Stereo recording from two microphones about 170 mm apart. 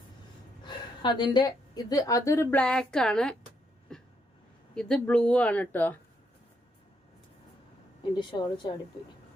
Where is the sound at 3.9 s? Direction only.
5° left (ahead or behind).